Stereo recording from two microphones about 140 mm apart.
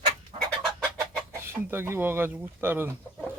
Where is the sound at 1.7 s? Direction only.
15° right (ahead or behind).